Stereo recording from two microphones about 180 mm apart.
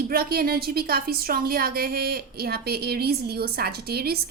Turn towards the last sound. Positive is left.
turn(degrees=-60)  # may be behind; listen again after turning